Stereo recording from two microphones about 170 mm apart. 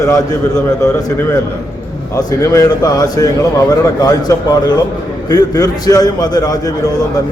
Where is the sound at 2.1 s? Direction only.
20° left (ahead or behind).